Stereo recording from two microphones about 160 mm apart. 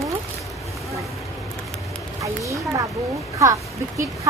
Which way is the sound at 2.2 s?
20° right (ahead or behind).